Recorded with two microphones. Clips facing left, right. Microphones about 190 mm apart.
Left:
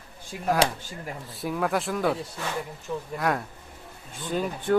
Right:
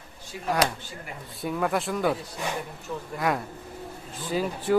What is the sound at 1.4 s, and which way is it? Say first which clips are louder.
Speech: even; centre (ahead or behind).